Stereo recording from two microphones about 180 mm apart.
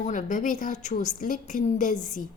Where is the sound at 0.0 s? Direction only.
45° left (ahead or behind).